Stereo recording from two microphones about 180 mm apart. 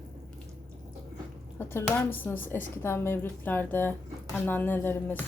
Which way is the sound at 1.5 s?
10° left (ahead or behind).